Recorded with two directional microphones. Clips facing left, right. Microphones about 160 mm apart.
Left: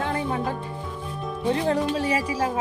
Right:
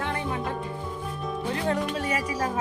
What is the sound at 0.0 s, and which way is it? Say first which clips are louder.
Music: left 4 dB; 30° left (ahead or behind).